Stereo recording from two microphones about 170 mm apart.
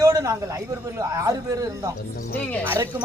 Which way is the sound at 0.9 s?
20° right (ahead or behind).